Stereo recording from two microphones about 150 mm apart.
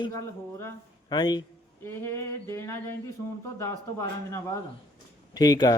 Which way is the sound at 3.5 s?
20° left (ahead or behind).